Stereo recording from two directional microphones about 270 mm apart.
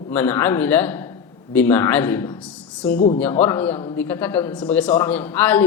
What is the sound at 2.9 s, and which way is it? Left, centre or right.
Speech, left.